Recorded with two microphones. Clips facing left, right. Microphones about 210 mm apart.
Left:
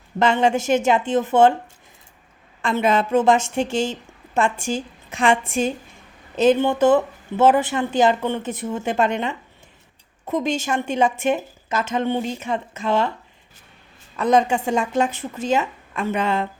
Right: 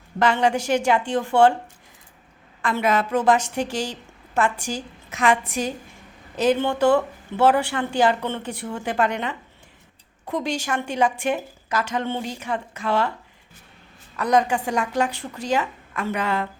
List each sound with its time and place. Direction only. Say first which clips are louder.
0.2 s speech: left 2 dB; 25° left (ahead or behind)
2.6 s speech: left 2 dB; 25° left (ahead or behind)
14.2 s speech: left 2 dB; 25° left (ahead or behind)